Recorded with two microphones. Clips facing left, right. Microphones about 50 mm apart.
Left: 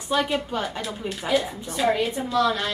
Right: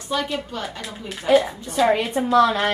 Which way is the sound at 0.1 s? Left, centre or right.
Centre.